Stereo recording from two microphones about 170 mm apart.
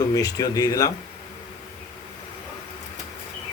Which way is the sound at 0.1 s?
20° left (ahead or behind).